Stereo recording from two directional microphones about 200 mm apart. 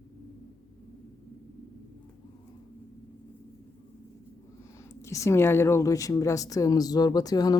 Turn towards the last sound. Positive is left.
turn(degrees=20)  # may be behind; listen again after turning